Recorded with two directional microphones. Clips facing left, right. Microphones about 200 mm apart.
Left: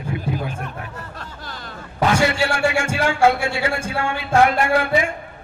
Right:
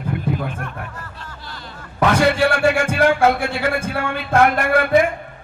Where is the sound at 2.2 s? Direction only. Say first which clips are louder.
Right 3 dB; 55° right (ahead or behind).